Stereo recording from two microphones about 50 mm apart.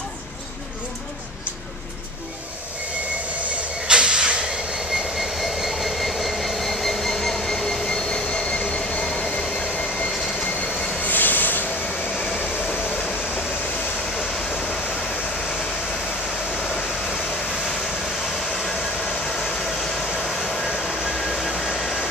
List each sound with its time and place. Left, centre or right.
3.8 s a sound: right
4.7 s train: centre
9.9 s vehicle: left
11.1 s train: left
12.6 s train: centre
14.2 s vehicle: centre
18.5 s vehicle: centre